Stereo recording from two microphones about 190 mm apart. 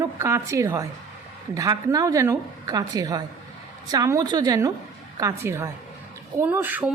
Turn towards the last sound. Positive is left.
turn(degrees=-10)  # may be behind; listen again after turning